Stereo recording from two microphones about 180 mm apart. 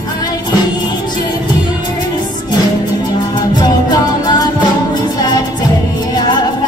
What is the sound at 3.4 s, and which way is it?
Music, 25° left (ahead or behind).